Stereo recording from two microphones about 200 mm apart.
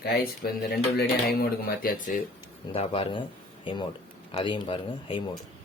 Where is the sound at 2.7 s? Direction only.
25° left (ahead or behind).